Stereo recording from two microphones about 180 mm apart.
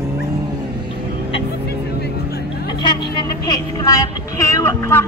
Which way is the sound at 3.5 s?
20° left (ahead or behind).